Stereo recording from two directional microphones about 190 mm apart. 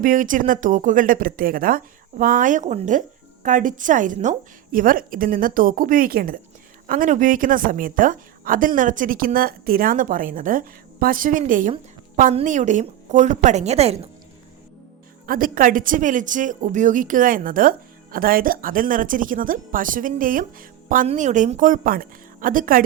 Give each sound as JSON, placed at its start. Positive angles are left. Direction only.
{"t": 0.0, "sound": "a woman's voice", "side_deg": -45}
{"t": 15.3, "sound": "a woman's voice", "side_deg": -45}